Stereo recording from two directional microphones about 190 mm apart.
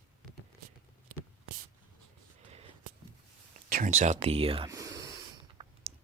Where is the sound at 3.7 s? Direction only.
45° right (ahead or behind).